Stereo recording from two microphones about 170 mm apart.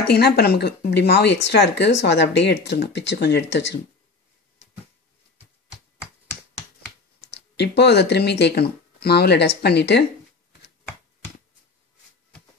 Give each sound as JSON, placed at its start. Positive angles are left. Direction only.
{"t": 0.0, "sound": "speech", "side_deg": 70}
{"t": 7.5, "sound": "speech", "side_deg": 80}